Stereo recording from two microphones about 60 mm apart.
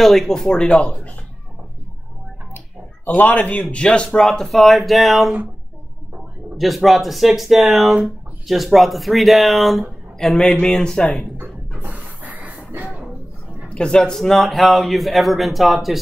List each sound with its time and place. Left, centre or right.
0.0 s a man's voice: centre
0.7 s a man's voice: left
3.2 s a man's voice: left; by 5.3 s centre
6.6 s a man's voice: centre
11.8 s a sound: right
13.7 s a man's voice: centre